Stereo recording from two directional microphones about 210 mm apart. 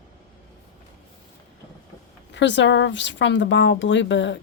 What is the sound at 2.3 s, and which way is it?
Speech, 60° left (ahead or behind).